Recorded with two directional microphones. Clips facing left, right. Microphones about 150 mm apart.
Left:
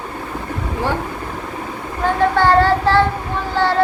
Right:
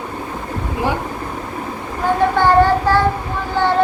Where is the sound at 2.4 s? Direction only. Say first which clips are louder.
Right 1 dB; 15° right (ahead or behind).